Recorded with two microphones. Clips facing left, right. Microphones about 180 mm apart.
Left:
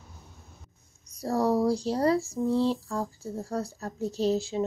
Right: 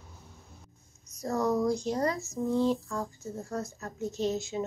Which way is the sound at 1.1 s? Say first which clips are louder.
Left 3 dB; 35° left (ahead or behind).